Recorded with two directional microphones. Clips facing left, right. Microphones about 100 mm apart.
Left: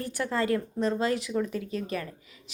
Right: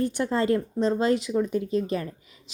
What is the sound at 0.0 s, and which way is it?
A woman's voice, 25° right (ahead or behind).